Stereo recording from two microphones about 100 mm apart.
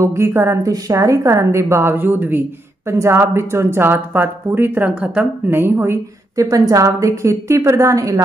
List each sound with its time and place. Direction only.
0.0 s a woman's voice: 25° right (ahead or behind)